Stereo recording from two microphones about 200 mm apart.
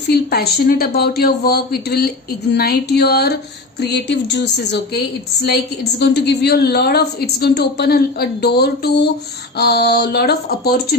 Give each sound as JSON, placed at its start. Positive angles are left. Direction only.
{"t": 0.1, "sound": "a woman's voice", "side_deg": 50}